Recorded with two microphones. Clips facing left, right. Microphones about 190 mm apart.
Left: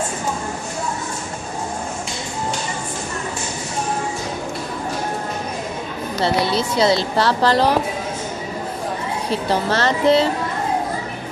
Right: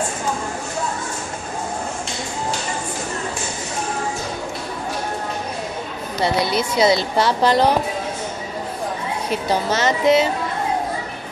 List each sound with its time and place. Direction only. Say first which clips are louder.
6.2 s a woman's voice: even; 15° right (ahead or behind)
9.3 s a woman's voice: left 1 dB; 15° right (ahead or behind)